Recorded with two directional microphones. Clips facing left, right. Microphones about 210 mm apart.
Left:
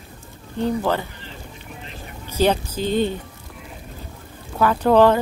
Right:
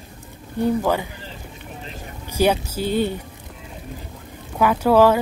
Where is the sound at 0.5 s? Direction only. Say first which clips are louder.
Right 2 dB; 10° right (ahead or behind).